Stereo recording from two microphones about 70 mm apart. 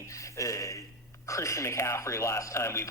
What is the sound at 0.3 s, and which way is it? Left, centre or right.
Speech, left.